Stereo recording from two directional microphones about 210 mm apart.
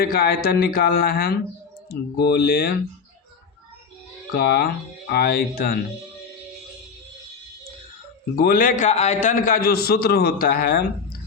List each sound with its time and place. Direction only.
0.0 s a man's voice: 45° left (ahead or behind)
4.4 s a man's voice: 50° left (ahead or behind)
8.4 s a man's voice: 40° left (ahead or behind)